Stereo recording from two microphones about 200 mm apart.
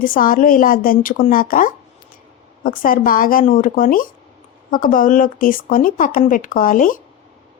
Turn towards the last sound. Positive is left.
turn(degrees=40)  # may be behind; listen again after turning